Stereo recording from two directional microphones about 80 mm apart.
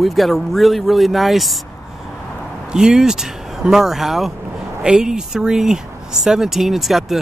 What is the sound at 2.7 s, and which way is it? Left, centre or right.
Speech, centre.